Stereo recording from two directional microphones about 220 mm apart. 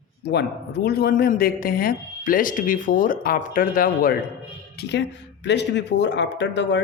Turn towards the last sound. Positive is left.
turn(degrees=55)  # may be behind; listen again after turning